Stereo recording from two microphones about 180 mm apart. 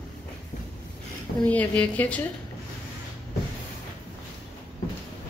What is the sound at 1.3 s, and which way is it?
Speech, 5° left (ahead or behind).